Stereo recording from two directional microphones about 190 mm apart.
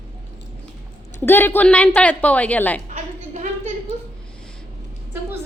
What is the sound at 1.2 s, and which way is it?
A woman's voice, 10° left (ahead or behind).